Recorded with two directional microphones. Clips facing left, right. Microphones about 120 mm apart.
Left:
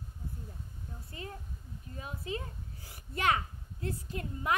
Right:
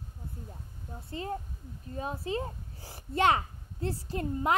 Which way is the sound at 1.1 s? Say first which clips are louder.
Right 10 dB; 35° right (ahead or behind).